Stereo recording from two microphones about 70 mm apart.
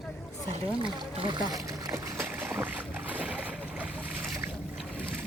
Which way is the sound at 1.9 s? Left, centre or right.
Right.